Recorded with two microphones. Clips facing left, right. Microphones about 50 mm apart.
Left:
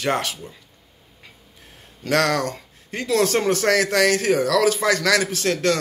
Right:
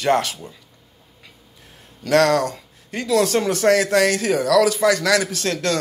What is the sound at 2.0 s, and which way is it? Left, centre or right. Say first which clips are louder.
Speech: right 4 dB; left.